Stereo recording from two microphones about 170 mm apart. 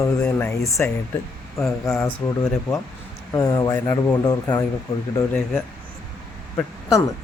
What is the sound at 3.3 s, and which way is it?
Speech, 20° left (ahead or behind).